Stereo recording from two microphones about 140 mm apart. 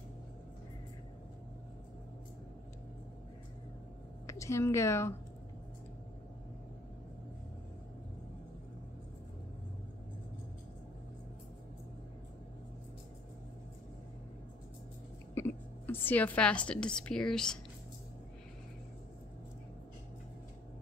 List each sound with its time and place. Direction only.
4.3 s speech: 20° left (ahead or behind)
15.3 s a woman's voice: 15° left (ahead or behind)